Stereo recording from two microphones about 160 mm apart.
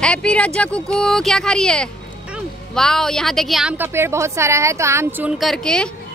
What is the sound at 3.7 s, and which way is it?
A woman's voice, 15° right (ahead or behind).